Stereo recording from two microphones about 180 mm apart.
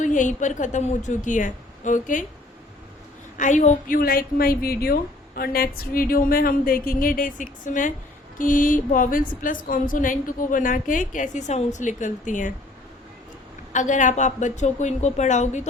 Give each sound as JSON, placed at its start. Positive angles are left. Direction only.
{"t": 0.0, "sound": "a woman's voice", "side_deg": 45}
{"t": 3.3, "sound": "a woman's voice", "side_deg": 45}
{"t": 13.7, "sound": "a woman's voice", "side_deg": 45}